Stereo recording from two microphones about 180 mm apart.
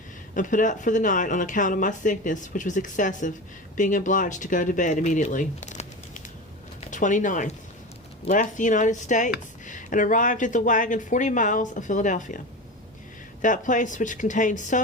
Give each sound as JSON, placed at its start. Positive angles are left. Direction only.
{"t": 0.3, "sound": "speech", "side_deg": 45}
{"t": 13.4, "sound": "speech", "side_deg": 45}